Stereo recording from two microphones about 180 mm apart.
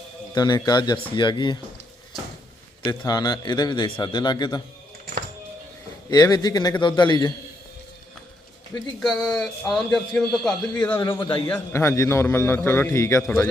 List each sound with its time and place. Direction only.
0.3 s a man's voice: 25° left (ahead or behind)
3.1 s a man's voice: 20° left (ahead or behind)
6.1 s a man's voice: 20° left (ahead or behind)
9.0 s a man's voice: centre (ahead or behind)
11.2 s a man's voice: 25° left (ahead or behind)
11.4 s a man's voice: 10° left (ahead or behind)